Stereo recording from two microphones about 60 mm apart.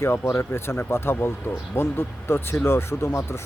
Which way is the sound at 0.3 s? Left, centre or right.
Left.